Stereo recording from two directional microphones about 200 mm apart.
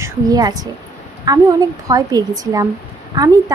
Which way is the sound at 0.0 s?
20° right (ahead or behind).